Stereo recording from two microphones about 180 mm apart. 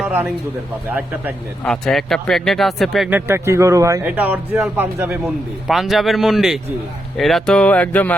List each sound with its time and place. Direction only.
0.0 s a sound: 10° right (ahead or behind)
1.6 s a man's voice: 5° left (ahead or behind)
3.1 s a man's voice: 15° right (ahead or behind); by 8.1 s 10° left (ahead or behind)